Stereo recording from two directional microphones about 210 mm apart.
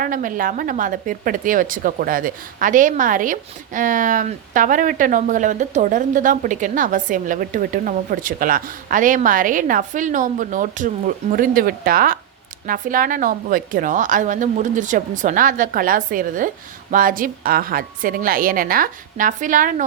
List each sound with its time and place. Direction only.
0.0 s speech: 40° right (ahead or behind)